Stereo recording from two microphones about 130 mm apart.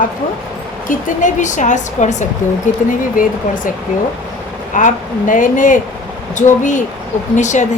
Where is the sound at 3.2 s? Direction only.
90° left.